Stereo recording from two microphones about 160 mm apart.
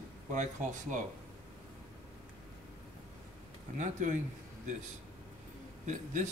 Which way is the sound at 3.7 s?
50° right (ahead or behind).